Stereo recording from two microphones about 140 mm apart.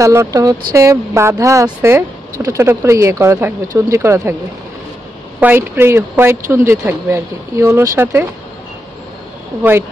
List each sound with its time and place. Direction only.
0.0 s speech: 20° right (ahead or behind)
5.4 s speech: 15° right (ahead or behind)
9.6 s speech: 15° right (ahead or behind)